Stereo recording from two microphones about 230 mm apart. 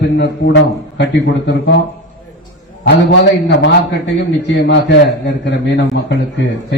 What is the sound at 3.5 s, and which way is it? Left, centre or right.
A man's voice, left.